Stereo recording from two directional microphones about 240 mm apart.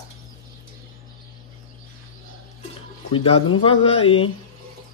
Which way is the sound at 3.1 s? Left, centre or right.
Left.